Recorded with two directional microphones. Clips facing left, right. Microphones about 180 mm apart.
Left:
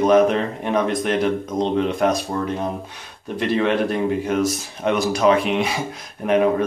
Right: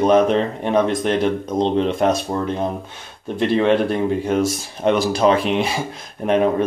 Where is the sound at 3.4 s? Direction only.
30° right (ahead or behind).